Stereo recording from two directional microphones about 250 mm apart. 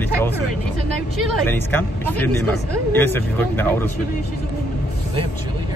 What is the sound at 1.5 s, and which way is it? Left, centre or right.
Speech, centre.